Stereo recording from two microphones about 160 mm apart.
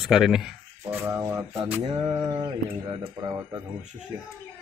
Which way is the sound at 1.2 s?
20° right (ahead or behind).